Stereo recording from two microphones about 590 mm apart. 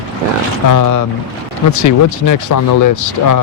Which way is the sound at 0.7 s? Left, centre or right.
Left.